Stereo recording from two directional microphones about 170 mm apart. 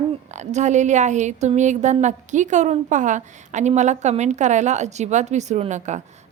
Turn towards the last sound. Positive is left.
turn(degrees=-45)  # may be behind; listen again after turning